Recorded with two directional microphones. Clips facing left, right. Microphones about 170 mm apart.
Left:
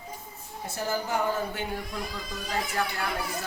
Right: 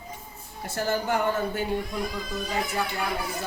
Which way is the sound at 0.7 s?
75° right (ahead or behind).